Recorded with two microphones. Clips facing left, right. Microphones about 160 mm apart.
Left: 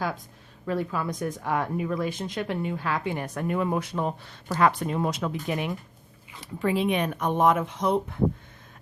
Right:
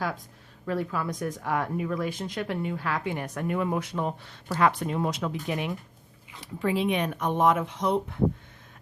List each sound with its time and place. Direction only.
0.6 s speech: 20° left (ahead or behind); by 7.9 s 45° left (ahead or behind)